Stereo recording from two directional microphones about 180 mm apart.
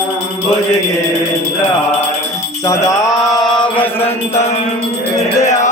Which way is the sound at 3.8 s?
35° left (ahead or behind).